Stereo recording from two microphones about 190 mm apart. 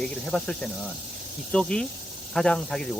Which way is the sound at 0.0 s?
5° left (ahead or behind).